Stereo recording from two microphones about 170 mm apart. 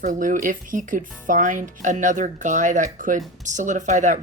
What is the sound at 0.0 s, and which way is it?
Speech, 50° right (ahead or behind).